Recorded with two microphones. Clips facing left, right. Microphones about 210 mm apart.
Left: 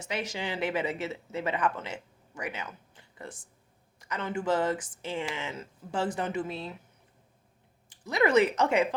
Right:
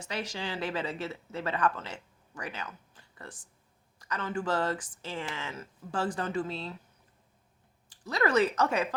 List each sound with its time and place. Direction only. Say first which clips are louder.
0.0 s speech: left 2 dB; 20° left (ahead or behind)
7.9 s speech: left 3 dB; 20° left (ahead or behind)